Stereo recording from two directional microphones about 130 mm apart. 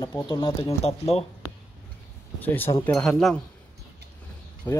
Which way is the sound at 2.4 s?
15° left (ahead or behind).